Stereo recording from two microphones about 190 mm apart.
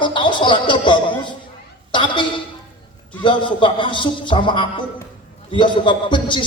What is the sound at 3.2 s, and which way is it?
A man's voice, 25° left (ahead or behind).